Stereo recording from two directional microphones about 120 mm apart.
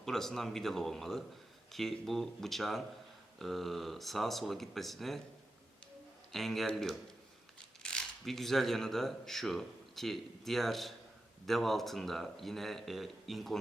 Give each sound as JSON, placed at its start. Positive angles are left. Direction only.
{"t": 0.0, "sound": "a man's voice", "side_deg": 5}
{"t": 6.3, "sound": "a man's voice", "side_deg": 0}